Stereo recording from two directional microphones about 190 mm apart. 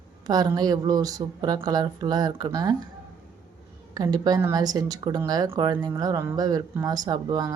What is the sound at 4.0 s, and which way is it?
Speech, 20° right (ahead or behind).